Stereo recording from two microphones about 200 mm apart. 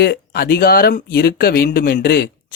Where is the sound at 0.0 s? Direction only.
50° left (ahead or behind).